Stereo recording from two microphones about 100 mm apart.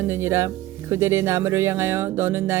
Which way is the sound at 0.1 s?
25° right (ahead or behind).